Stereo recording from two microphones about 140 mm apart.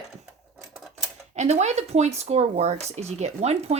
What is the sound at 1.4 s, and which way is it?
Speech, 55° right (ahead or behind).